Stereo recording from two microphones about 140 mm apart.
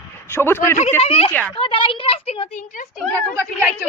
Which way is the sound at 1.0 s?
45° left (ahead or behind).